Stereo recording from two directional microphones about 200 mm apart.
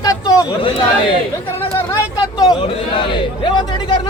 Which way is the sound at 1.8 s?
15° left (ahead or behind).